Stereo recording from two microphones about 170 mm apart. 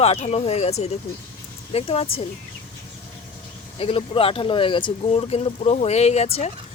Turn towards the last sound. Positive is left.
turn(degrees=40)  # may be behind; listen again after turning